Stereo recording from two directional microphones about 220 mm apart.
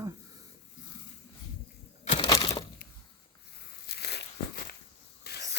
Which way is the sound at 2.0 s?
25° left (ahead or behind).